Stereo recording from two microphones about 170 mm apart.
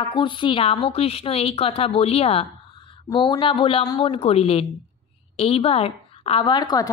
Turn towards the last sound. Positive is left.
turn(degrees=25)  # may be behind; listen again after turning